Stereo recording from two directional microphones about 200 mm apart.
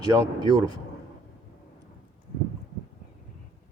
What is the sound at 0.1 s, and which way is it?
Speech, 20° right (ahead or behind).